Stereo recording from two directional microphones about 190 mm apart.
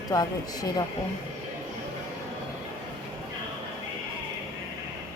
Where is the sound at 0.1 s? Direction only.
20° left (ahead or behind).